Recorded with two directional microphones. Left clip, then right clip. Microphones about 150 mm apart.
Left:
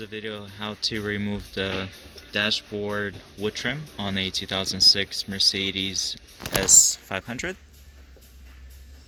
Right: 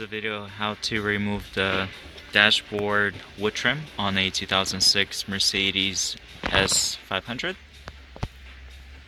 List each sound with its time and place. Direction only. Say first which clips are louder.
0.0 s speech: right 4 dB; 25° left (ahead or behind)